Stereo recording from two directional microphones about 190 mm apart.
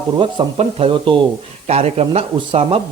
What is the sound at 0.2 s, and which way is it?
Speech, 30° right (ahead or behind).